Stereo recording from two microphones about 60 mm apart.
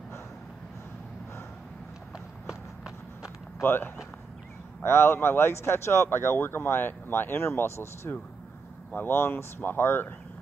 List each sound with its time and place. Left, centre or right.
2.1 s run: centre
3.6 s speech: left